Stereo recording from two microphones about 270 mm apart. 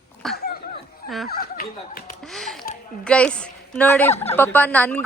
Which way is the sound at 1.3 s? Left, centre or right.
Left.